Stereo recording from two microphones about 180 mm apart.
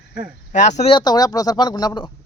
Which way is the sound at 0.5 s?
40° left (ahead or behind).